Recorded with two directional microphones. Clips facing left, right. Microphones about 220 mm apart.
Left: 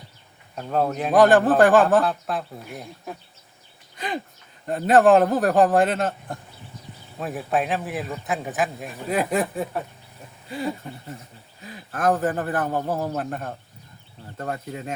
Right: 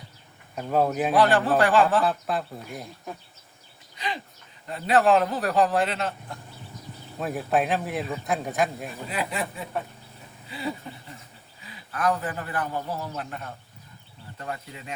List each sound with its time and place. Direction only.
0.5 s a man's voice: 5° right (ahead or behind)
1.1 s speech: 45° left (ahead or behind)
2.0 s a man's voice: centre (ahead or behind)
3.9 s a sound: 50° left (ahead or behind)
4.6 s speech: 50° left (ahead or behind)
7.2 s a man's voice: centre (ahead or behind)
9.0 s speech: 45° left (ahead or behind)
11.6 s speech: 45° left (ahead or behind)